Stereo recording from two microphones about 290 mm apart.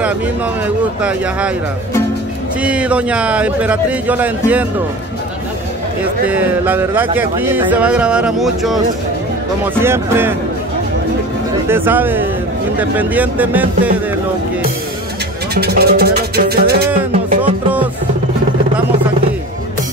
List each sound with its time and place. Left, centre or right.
2.6 s speech: centre
6.2 s speech: centre
9.8 s speech: centre
11.7 s speech: centre
15.5 s music: right